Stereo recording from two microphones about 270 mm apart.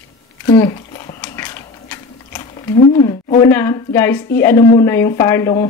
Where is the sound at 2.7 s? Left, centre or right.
Left.